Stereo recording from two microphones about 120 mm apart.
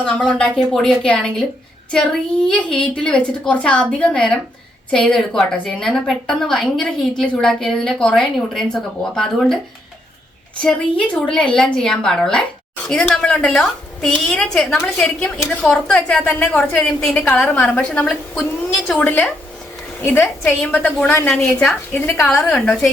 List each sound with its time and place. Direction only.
0.0 s a woman's voice: 5° left (ahead or behind)
2.5 s a woman's voice: 5° left (ahead or behind)
10.6 s a woman's voice: 10° left (ahead or behind)